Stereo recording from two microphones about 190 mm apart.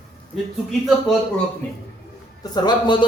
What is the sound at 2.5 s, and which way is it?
Speech, 25° left (ahead or behind).